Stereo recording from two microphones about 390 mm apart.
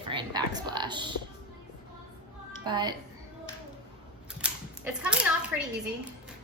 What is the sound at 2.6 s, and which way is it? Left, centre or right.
Speech, centre.